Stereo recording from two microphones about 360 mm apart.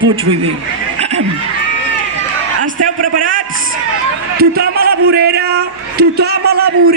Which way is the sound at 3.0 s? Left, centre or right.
Right.